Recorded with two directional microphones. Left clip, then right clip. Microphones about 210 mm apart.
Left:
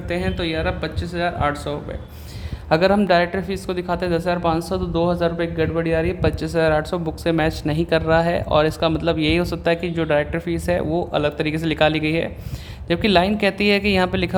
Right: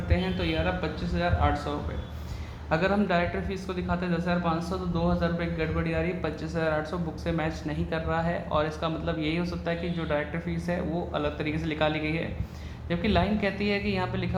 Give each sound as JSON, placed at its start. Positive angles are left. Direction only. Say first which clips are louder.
{"t": 0.1, "sound": "speech", "louder": "left 6 dB", "side_deg": 55}